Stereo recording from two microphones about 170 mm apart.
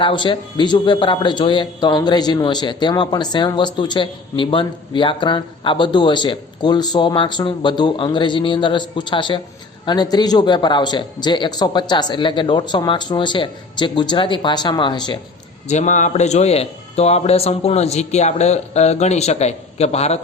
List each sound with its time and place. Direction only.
0.0 s a man's voice: 30° left (ahead or behind)
15.7 s speech: 45° left (ahead or behind)